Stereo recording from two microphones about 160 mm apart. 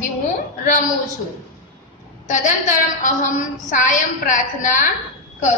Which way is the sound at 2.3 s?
50° left (ahead or behind).